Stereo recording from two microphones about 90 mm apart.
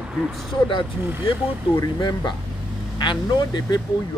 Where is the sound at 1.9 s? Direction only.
55° left (ahead or behind).